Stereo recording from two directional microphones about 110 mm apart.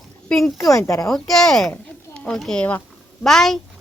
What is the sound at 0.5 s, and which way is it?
Speech, 30° left (ahead or behind).